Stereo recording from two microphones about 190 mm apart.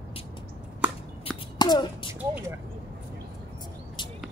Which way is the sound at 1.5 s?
25° left (ahead or behind).